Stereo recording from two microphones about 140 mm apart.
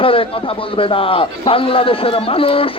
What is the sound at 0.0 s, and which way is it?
Speech, 40° left (ahead or behind).